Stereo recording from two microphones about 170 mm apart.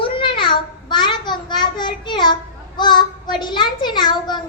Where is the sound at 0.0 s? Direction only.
30° left (ahead or behind).